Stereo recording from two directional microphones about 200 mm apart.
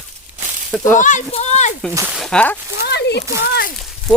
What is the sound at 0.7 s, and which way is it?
Speech, 10° left (ahead or behind).